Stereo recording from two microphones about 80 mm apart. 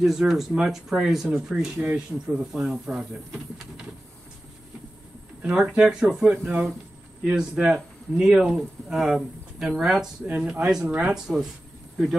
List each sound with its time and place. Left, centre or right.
0.0 s speech: centre
5.4 s speech: centre
6.3 s speech: right
7.5 s speech: centre
10.2 s speech: right
10.6 s speech: centre